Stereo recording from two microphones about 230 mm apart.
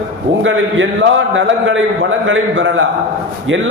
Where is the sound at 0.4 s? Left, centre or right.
Right.